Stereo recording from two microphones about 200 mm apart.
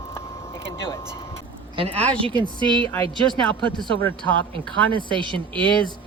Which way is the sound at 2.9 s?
5° left (ahead or behind).